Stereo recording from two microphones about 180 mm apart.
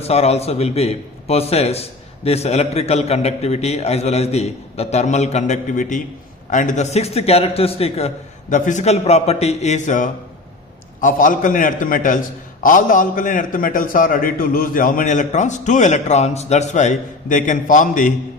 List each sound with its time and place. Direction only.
0.0 s a man's voice: 35° left (ahead or behind)